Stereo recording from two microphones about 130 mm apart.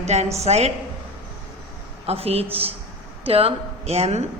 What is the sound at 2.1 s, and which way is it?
A woman's voice, 50° right (ahead or behind).